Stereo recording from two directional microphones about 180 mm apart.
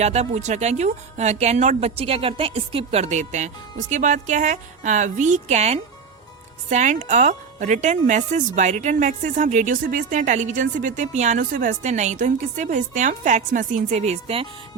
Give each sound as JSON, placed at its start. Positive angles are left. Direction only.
{"t": 0.0, "sound": "a woman's voice", "side_deg": -35}